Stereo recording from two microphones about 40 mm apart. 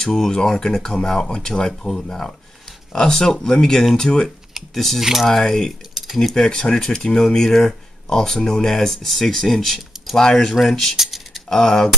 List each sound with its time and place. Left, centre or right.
0.2 s speech: centre
4.7 s speech: centre
10.1 s speech: centre
11.0 s typing: centre
11.4 s speech: centre